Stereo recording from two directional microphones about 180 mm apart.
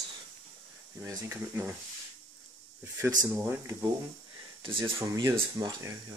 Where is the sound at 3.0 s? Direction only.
15° right (ahead or behind).